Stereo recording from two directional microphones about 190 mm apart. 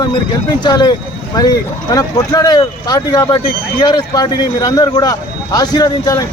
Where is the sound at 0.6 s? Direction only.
20° left (ahead or behind).